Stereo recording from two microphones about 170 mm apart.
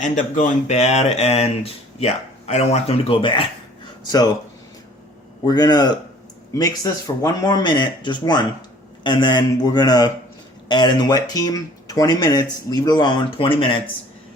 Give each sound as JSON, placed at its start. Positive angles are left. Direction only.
{"t": 0.0, "sound": "speech", "side_deg": 50}
{"t": 5.5, "sound": "speech", "side_deg": 25}